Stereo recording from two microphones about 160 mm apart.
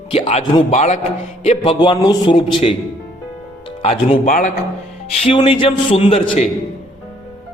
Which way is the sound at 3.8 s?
40° left (ahead or behind).